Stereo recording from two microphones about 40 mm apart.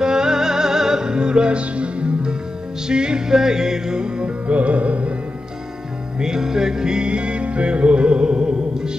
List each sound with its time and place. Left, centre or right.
0.0 s music: centre; by 5.1 s right
6.1 s music: centre